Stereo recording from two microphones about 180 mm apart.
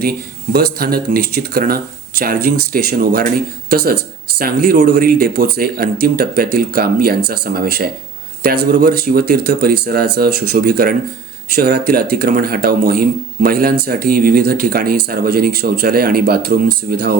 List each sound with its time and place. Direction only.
0.5 s speech: 60° right (ahead or behind)